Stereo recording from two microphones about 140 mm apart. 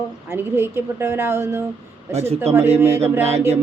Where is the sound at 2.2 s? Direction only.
45° right (ahead or behind).